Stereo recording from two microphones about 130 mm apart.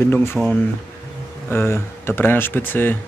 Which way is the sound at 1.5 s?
15° left (ahead or behind).